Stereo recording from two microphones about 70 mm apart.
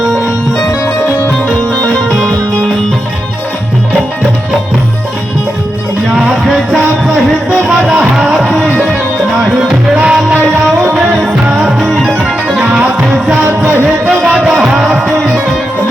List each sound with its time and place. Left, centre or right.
0.0 s music: centre
6.1 s music: centre
11.5 s music: centre
13.5 s music: right
14.0 s music: centre